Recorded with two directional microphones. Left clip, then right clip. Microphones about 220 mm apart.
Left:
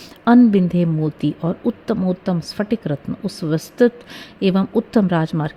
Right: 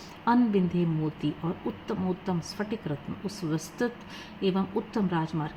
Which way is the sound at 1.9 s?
45° left (ahead or behind).